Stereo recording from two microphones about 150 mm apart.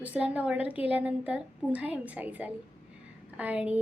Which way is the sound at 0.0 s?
10° right (ahead or behind).